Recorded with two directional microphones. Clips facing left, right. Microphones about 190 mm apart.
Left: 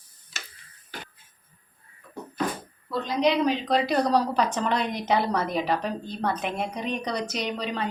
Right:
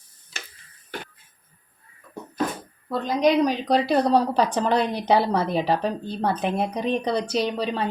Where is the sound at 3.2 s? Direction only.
40° right (ahead or behind).